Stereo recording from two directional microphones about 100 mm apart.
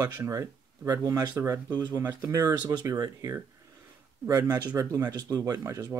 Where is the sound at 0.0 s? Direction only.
30° right (ahead or behind).